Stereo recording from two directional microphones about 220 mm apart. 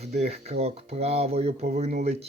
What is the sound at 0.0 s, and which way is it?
Speech, 30° right (ahead or behind).